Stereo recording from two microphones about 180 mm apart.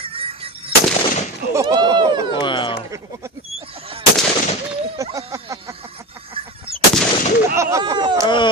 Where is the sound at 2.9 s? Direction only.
15° right (ahead or behind).